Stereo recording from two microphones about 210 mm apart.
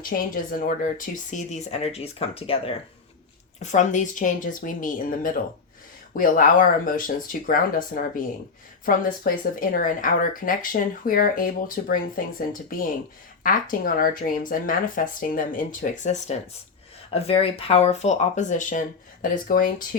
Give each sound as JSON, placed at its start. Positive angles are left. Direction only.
{"t": 0.1, "sound": "speech", "side_deg": 40}
{"t": 13.4, "sound": "speech", "side_deg": 40}